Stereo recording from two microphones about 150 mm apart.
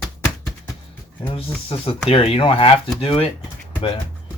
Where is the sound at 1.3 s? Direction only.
35° left (ahead or behind).